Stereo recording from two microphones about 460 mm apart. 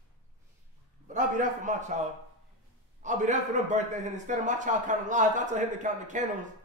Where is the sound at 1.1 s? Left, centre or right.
Centre.